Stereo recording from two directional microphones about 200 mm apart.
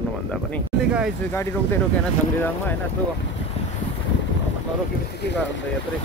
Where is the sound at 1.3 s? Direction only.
10° left (ahead or behind).